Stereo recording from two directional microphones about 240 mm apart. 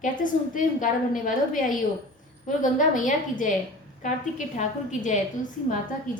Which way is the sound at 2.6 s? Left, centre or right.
Left.